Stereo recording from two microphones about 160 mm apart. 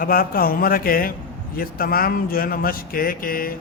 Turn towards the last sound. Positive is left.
turn(degrees=65)  # may be behind; listen again after turning